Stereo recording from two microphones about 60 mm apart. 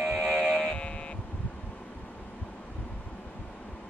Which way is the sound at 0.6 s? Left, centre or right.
Centre.